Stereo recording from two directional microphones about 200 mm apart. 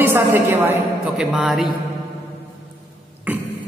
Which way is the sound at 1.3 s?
Centre (ahead or behind).